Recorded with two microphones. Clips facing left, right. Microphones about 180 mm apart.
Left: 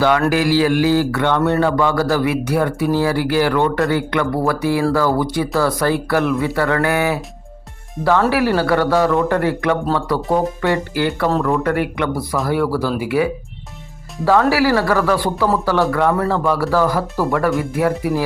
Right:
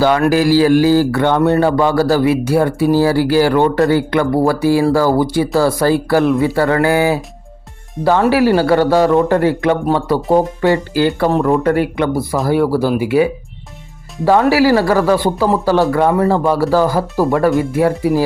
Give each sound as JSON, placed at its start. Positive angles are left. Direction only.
{"t": 0.3, "sound": "a man's voice", "side_deg": -35}
{"t": 8.3, "sound": "speech", "side_deg": -30}
{"t": 11.3, "sound": "speech", "side_deg": -15}
{"t": 11.5, "sound": "speech", "side_deg": -25}